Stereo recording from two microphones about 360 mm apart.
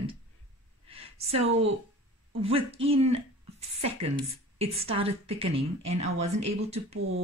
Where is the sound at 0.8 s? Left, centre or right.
Centre.